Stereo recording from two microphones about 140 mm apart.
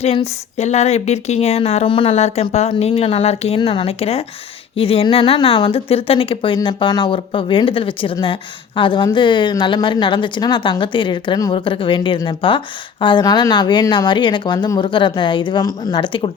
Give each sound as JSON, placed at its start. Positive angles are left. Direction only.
{"t": 0.0, "sound": "a woman's voice", "side_deg": 50}